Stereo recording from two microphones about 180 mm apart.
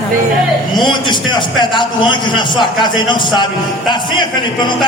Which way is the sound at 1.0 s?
25° left (ahead or behind).